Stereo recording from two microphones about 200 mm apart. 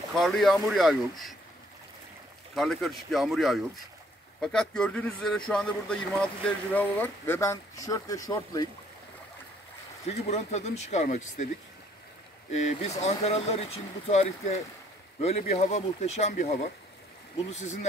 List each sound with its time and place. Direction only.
0.1 s speech: centre (ahead or behind)
2.5 s speech: centre (ahead or behind); by 8.6 s 15° left (ahead or behind)
10.0 s speech: 30° left (ahead or behind)
12.6 s speech: 35° left (ahead or behind)